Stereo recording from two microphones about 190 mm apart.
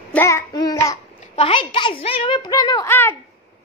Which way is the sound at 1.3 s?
30° left (ahead or behind).